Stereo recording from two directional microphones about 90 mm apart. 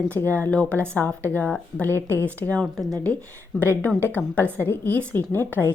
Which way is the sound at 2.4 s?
15° left (ahead or behind).